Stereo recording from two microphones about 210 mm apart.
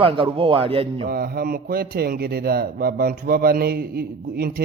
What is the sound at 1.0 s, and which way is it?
Speech, 45° right (ahead or behind).